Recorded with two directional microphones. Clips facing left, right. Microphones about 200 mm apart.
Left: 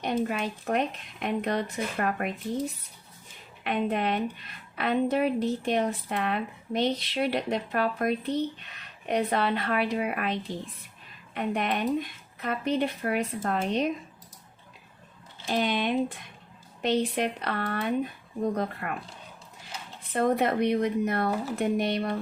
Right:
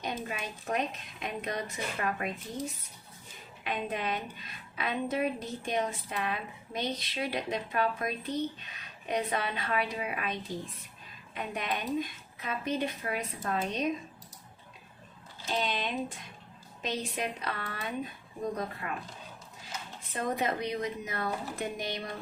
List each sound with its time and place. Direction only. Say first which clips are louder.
0.0 s a woman's voice: left 8 dB; 60° left (ahead or behind)
3.6 s a woman's voice: left 7 dB; 60° left (ahead or behind)
15.4 s a woman's voice: left 6 dB; 60° left (ahead or behind)
20.1 s a woman's voice: left 7 dB; 60° left (ahead or behind)